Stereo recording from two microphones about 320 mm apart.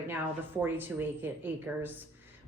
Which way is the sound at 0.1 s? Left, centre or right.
Centre.